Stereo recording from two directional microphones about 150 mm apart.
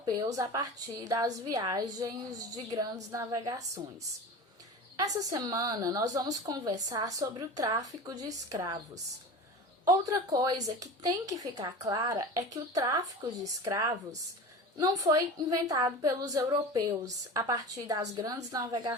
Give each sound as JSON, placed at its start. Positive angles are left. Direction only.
{"t": 0.0, "sound": "a woman's voice", "side_deg": -25}
{"t": 4.9, "sound": "a woman's voice", "side_deg": -25}
{"t": 9.8, "sound": "a woman's voice", "side_deg": -25}